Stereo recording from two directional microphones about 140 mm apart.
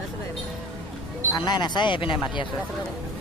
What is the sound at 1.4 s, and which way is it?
Speech, 30° left (ahead or behind).